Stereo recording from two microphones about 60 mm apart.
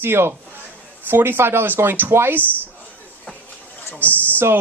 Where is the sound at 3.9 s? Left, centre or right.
Left.